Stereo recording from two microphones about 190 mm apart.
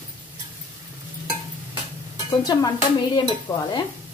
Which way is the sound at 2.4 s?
20° left (ahead or behind).